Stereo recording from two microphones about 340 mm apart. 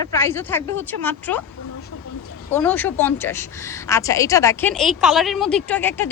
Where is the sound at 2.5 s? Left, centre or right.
Centre.